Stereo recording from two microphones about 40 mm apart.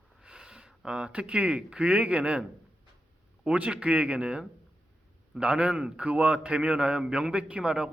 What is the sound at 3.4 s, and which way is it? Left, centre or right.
Speech, right.